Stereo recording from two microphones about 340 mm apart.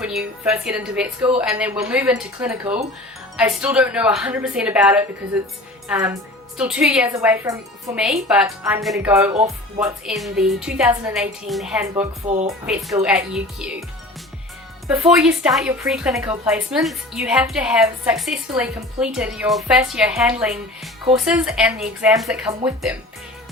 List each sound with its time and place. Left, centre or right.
0.0 s a woman's voice: centre
9.3 s speech: centre
9.8 s a woman's voice: centre
12.2 s speech: centre
12.5 s a woman's voice: centre
14.8 s a woman's voice: centre